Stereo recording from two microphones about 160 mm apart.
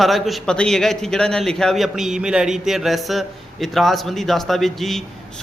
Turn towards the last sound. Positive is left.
turn(degrees=0)  # may be behind; listen again after turning